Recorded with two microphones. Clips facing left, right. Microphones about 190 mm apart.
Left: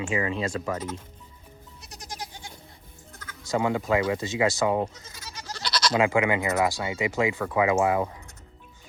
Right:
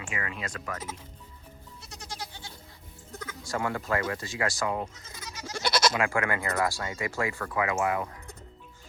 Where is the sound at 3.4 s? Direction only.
20° left (ahead or behind).